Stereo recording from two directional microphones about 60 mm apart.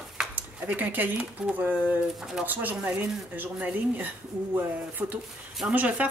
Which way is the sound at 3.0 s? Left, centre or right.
Right.